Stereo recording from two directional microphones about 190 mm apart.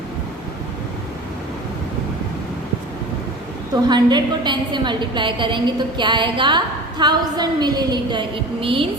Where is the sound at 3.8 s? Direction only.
20° right (ahead or behind).